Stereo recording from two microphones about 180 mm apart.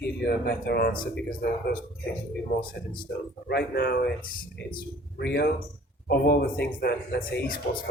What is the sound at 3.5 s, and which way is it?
Speech, 65° left (ahead or behind).